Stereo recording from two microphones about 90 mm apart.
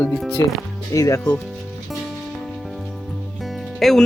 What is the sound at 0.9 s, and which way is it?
Speech, 40° left (ahead or behind).